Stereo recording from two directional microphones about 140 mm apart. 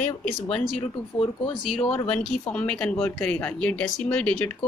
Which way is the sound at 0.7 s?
40° left (ahead or behind).